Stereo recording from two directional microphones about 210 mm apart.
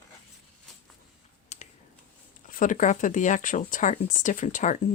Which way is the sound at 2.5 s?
40° left (ahead or behind).